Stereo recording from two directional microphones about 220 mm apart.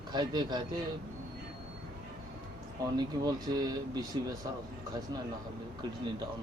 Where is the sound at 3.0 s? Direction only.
20° right (ahead or behind).